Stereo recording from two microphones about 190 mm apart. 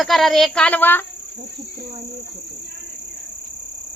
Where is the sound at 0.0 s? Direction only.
Centre (ahead or behind).